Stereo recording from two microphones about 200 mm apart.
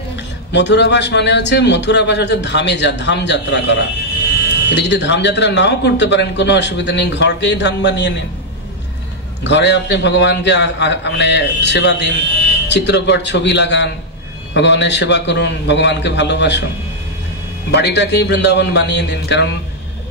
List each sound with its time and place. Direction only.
0.5 s speech: 60° left (ahead or behind)
9.4 s speech: 60° left (ahead or behind)
17.7 s speech: 60° left (ahead or behind)